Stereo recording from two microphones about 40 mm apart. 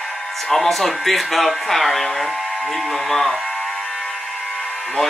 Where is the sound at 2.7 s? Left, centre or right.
Centre.